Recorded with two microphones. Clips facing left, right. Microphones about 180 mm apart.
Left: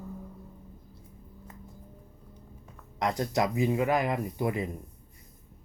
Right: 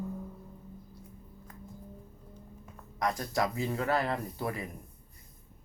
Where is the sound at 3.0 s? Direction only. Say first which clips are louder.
Left 3 dB; 20° left (ahead or behind).